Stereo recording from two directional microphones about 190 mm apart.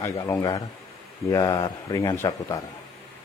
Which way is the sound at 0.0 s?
15° left (ahead or behind).